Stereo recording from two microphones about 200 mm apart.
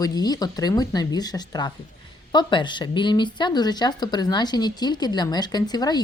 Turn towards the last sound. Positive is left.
turn(degrees=20)  # may be behind; listen again after turning